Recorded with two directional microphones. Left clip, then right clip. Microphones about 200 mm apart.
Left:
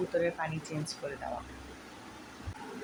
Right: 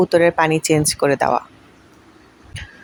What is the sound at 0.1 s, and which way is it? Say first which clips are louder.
Speech: right 18 dB; 60° right (ahead or behind).